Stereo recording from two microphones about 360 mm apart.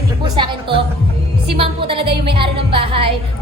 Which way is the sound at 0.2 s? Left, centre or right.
Centre.